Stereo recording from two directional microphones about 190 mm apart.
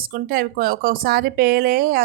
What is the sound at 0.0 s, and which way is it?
A woman's voice, 50° right (ahead or behind).